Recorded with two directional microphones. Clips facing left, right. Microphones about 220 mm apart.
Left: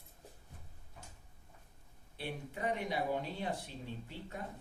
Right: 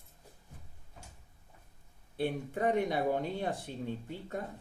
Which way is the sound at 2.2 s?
50° right (ahead or behind).